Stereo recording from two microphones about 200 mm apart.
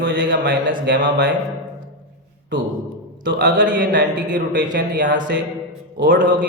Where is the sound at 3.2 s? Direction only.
65° right (ahead or behind).